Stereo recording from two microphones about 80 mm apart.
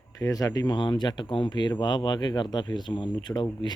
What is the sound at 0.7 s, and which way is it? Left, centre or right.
Speech, left.